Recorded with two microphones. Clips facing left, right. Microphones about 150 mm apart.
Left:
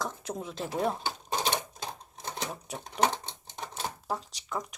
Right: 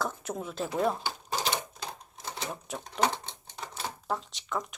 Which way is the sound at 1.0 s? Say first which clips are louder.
Left 1 dB; 20° left (ahead or behind).